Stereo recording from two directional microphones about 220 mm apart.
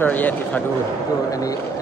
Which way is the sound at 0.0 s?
10° left (ahead or behind).